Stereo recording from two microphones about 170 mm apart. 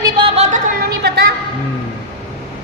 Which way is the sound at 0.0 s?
30° right (ahead or behind).